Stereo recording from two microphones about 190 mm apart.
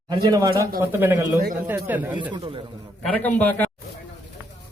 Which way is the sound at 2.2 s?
25° right (ahead or behind).